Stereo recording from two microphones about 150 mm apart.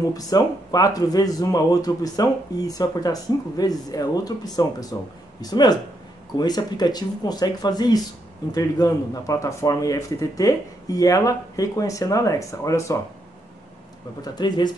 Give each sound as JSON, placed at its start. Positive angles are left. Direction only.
{"t": 0.1, "sound": "speech", "side_deg": 25}
{"t": 14.2, "sound": "speech", "side_deg": 30}